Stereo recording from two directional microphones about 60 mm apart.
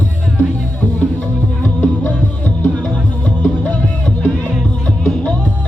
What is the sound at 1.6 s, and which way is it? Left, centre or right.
Music, left.